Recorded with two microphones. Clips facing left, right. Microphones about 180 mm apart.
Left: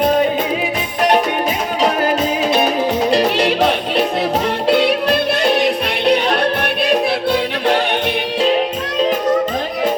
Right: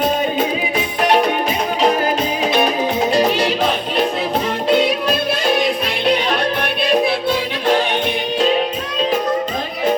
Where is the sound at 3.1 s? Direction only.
70° left (ahead or behind).